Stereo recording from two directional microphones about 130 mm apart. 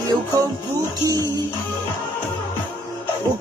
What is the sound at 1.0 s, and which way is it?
Music, 25° right (ahead or behind).